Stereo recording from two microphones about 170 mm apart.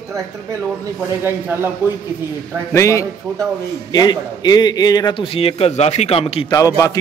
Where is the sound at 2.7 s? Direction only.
15° left (ahead or behind); by 6.5 s 35° left (ahead or behind).